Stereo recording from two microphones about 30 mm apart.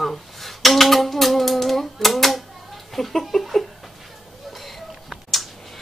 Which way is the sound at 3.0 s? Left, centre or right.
Centre.